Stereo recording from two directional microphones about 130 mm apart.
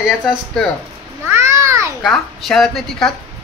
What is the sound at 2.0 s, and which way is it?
Speech, centre (ahead or behind).